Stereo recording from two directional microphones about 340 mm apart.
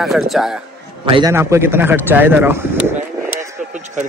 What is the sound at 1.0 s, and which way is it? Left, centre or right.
A man's voice, centre.